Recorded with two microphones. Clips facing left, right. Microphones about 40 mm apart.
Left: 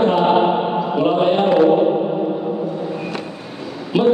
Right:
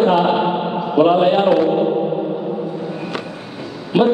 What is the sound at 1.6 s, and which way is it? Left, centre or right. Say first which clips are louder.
Speech: left 3 dB; centre.